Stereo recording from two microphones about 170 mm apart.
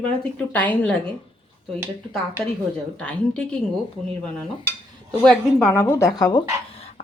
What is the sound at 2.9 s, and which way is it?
Speech, 5° left (ahead or behind).